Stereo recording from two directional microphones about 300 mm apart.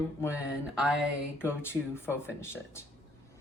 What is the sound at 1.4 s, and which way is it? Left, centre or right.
Speech, centre.